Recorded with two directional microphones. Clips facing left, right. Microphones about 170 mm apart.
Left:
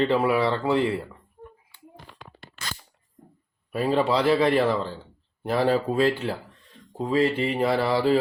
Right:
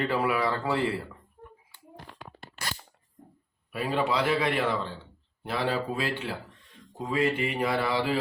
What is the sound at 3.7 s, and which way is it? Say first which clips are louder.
Speech: left 5 dB; 35° left (ahead or behind).